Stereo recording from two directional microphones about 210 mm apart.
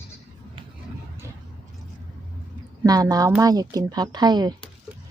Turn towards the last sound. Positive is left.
turn(degrees=-20)  # may be behind; listen again after turning